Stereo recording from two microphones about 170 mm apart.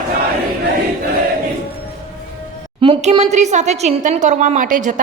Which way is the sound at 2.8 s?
30° right (ahead or behind).